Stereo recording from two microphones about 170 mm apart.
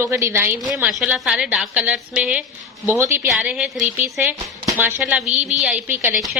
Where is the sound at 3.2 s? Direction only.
5° right (ahead or behind).